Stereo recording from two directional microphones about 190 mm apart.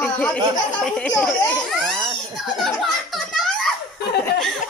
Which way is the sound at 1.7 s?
Centre (ahead or behind).